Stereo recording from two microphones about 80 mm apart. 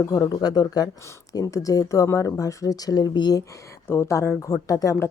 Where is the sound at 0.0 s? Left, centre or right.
Left.